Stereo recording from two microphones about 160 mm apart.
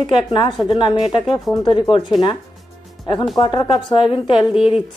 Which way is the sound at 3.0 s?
30° left (ahead or behind).